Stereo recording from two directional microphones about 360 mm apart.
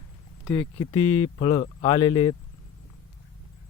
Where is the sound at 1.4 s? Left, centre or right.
Centre.